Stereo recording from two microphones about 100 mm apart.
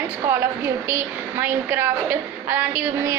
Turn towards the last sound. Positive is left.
turn(degrees=-15)  # may be behind; listen again after turning